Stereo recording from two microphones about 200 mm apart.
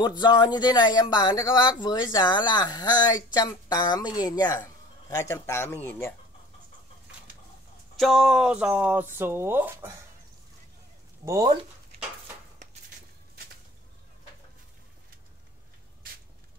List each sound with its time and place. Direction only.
0.0 s speech: 20° left (ahead or behind)
7.9 s speech: centre (ahead or behind)
11.2 s speech: 15° right (ahead or behind)